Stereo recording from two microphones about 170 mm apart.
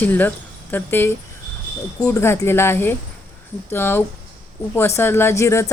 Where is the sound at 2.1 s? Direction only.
15° left (ahead or behind).